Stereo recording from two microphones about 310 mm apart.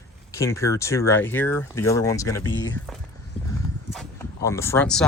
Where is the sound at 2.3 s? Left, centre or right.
Left.